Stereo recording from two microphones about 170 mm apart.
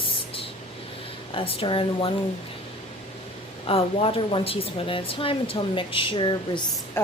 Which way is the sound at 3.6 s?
35° left (ahead or behind).